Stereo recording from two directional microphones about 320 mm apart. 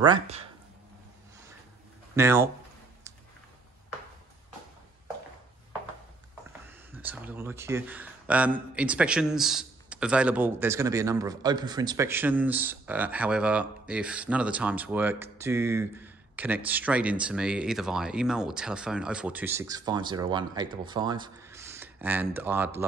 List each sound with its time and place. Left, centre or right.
0.0 s speech: centre
2.1 s speech: centre
6.9 s a man's voice: centre